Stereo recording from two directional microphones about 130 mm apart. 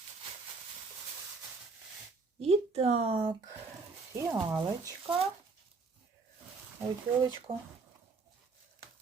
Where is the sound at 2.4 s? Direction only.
50° right (ahead or behind); by 4.7 s 35° right (ahead or behind).